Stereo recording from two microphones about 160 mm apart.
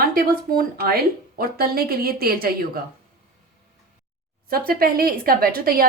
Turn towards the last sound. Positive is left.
turn(degrees=-70)  # may be behind; listen again after turning